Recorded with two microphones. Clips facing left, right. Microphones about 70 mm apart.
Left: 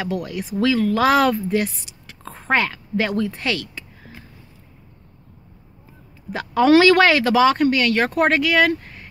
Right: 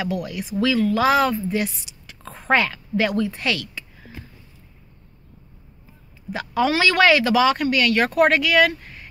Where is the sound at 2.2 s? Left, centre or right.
Left.